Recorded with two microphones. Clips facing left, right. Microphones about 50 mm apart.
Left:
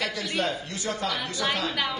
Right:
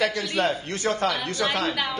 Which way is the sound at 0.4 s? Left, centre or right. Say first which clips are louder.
Right 6 dB; right.